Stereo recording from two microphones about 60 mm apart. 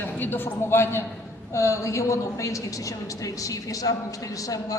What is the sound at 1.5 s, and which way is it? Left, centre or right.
A woman's voice, left.